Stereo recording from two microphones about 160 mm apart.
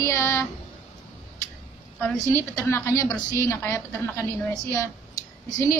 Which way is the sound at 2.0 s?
15° left (ahead or behind).